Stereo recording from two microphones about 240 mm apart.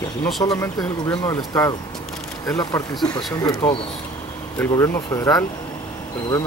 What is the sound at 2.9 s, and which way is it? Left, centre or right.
Speech, centre.